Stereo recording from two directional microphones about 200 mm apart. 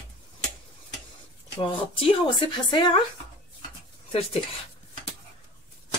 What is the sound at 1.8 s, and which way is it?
Speech, 25° left (ahead or behind).